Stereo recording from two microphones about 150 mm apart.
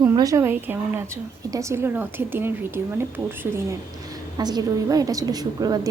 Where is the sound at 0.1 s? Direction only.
20° right (ahead or behind).